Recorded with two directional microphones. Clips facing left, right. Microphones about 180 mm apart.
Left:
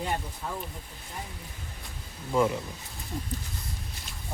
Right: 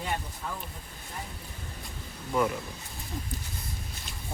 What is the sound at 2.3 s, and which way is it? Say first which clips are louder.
Speech: left 2 dB; 25° left (ahead or behind).